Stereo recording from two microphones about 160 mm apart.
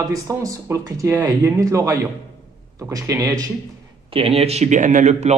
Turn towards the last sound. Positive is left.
turn(degrees=-50)  # may be behind; listen again after turning